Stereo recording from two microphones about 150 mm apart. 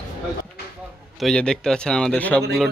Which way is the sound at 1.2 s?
5° left (ahead or behind).